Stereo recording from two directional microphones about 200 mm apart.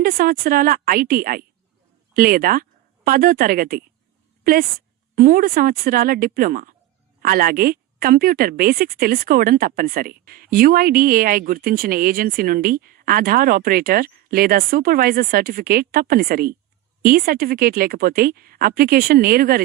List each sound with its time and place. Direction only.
0.0 s a woman's voice: 45° right (ahead or behind)
5.1 s a woman's voice: 45° right (ahead or behind)